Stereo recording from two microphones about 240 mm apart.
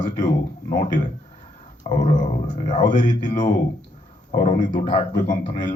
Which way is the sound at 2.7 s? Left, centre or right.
Left.